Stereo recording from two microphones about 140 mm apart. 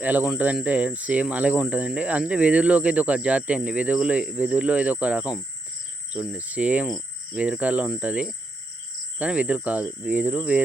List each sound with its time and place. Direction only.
0.0 s cricket: 10° right (ahead or behind)